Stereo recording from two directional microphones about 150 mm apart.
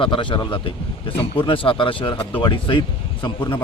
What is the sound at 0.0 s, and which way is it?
Speech, 35° left (ahead or behind).